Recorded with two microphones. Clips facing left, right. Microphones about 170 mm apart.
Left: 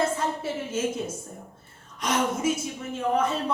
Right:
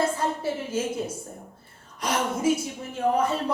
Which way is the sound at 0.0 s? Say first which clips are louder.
Right 1 dB; 30° right (ahead or behind).